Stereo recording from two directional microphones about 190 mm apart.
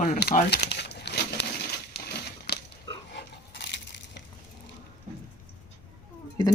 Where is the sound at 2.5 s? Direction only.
60° left (ahead or behind).